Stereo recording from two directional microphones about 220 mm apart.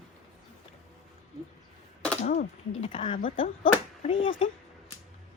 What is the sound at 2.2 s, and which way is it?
Speech, 30° left (ahead or behind).